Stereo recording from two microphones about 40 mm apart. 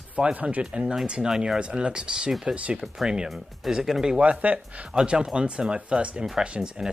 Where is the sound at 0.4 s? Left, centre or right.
Right.